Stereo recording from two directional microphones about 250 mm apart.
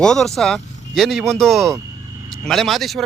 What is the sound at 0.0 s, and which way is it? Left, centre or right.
Speech, centre.